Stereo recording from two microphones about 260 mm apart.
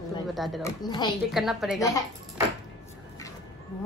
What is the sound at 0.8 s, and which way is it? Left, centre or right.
Speech, centre.